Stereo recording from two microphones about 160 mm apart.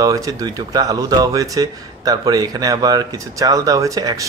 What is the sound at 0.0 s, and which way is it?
Speech, 20° right (ahead or behind).